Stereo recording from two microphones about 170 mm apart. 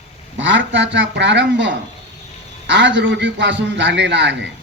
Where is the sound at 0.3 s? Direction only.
90° right.